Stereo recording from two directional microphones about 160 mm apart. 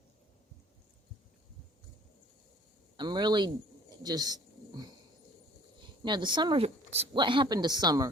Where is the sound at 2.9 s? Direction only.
25° right (ahead or behind).